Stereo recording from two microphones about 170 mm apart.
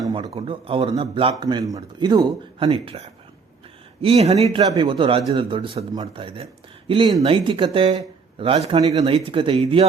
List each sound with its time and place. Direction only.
0.0 s a man's voice: 30° right (ahead or behind)